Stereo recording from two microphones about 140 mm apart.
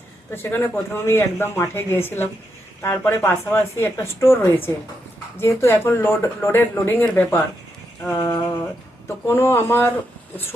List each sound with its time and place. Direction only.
0.3 s speech: 15° left (ahead or behind)
8.2 s a sound: 20° left (ahead or behind)
9.0 s speech: 20° left (ahead or behind)